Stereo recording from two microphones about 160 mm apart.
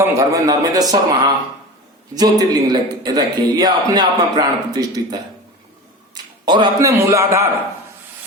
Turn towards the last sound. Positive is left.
turn(degrees=-15)  # may be behind; listen again after turning